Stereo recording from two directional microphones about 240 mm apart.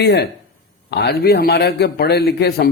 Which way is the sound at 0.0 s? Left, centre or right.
Left.